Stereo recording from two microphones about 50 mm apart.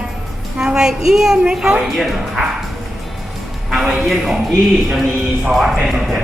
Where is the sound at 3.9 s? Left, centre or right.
Centre.